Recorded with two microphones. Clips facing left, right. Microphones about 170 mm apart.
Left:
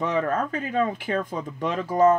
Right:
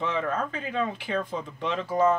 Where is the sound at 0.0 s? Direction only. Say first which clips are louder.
Left 4 dB; 45° left (ahead or behind).